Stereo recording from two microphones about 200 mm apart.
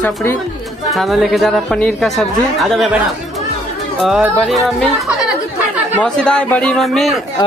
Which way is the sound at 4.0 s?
Centre (ahead or behind).